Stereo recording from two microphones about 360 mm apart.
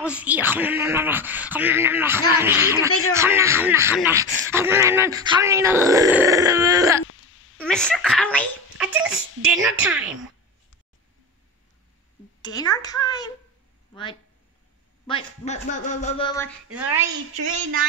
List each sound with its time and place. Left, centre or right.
0.0 s speech: centre
7.5 s a child's voice: centre
12.4 s a man's voice: centre
15.0 s a man's voice: centre
16.7 s speech: centre